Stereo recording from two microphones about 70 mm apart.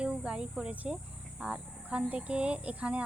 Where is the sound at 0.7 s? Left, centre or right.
Right.